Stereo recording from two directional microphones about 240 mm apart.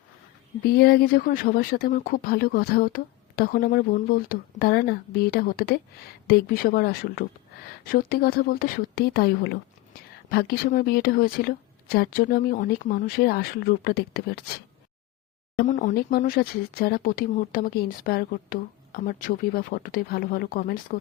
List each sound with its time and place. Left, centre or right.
0.8 s speech: left
15.5 s speech: left